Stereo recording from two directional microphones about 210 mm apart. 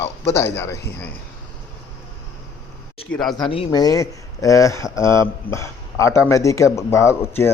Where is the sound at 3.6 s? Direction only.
15° left (ahead or behind).